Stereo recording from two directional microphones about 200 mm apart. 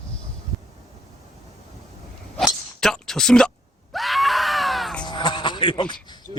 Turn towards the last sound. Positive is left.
turn(degrees=25)  # may be behind; listen again after turning